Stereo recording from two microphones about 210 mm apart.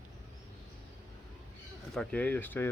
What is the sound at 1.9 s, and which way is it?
Speech, 5° left (ahead or behind).